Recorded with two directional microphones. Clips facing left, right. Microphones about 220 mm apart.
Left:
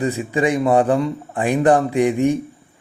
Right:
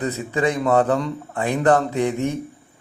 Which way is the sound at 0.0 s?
10° left (ahead or behind).